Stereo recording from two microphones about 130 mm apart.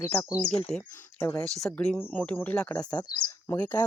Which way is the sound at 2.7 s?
30° left (ahead or behind).